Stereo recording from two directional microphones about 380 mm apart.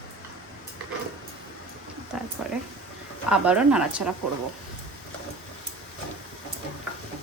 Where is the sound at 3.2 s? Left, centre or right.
Centre.